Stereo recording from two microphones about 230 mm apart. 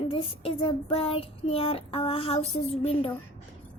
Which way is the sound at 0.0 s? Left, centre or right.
Left.